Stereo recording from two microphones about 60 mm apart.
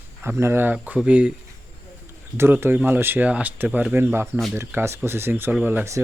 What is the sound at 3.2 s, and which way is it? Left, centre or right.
Speech, right.